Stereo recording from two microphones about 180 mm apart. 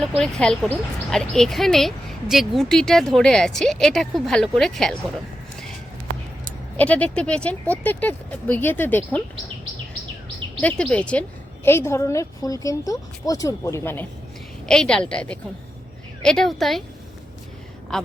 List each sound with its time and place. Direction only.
0.2 s speech: centre (ahead or behind)
6.7 s a woman's voice: 10° left (ahead or behind)
10.6 s a woman's voice: 5° left (ahead or behind)
17.9 s speech: centre (ahead or behind)